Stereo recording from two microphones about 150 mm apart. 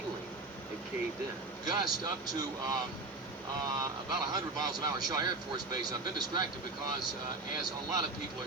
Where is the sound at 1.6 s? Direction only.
25° right (ahead or behind).